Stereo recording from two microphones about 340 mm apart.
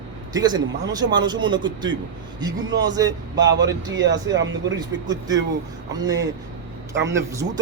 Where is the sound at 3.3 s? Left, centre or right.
Right.